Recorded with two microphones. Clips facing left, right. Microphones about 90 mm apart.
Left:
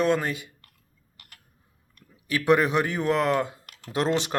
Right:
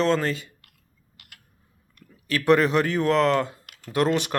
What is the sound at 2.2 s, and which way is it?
Speech, 15° left (ahead or behind).